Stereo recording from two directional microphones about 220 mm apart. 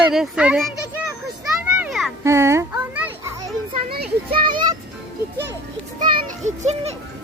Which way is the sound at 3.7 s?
45° right (ahead or behind).